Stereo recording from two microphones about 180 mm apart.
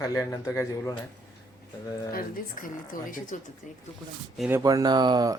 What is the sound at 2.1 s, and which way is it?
Speech, 50° left (ahead or behind).